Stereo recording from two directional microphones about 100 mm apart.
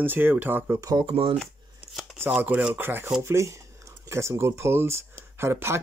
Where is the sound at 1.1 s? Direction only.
80° right.